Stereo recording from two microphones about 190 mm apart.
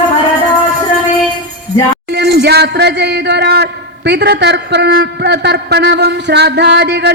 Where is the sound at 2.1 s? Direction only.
60° right (ahead or behind).